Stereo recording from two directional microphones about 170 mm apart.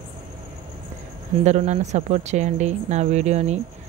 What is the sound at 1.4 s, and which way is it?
Speech, 40° right (ahead or behind).